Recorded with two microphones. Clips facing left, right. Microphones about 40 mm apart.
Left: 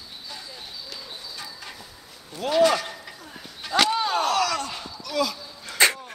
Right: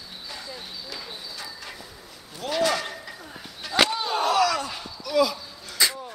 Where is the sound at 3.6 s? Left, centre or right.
Centre.